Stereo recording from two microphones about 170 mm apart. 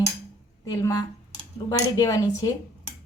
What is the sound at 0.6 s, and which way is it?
A woman's voice, 20° left (ahead or behind).